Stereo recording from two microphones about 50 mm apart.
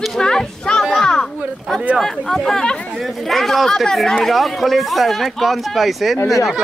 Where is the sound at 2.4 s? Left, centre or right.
Centre.